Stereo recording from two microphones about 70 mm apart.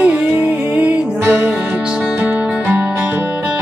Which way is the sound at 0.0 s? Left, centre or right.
Centre.